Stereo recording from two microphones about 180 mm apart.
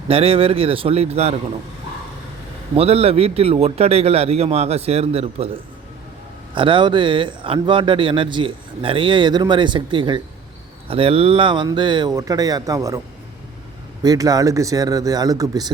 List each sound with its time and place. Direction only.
0.1 s a man's voice: 30° right (ahead or behind)
2.7 s a man's voice: 35° right (ahead or behind)
6.5 s a man's voice: 30° right (ahead or behind)
14.0 s a man's voice: 20° right (ahead or behind)